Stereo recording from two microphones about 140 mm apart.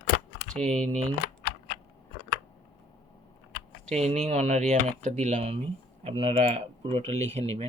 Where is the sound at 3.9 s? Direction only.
50° right (ahead or behind).